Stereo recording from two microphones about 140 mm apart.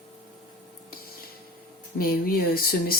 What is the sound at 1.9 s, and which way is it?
Speech, 90° left.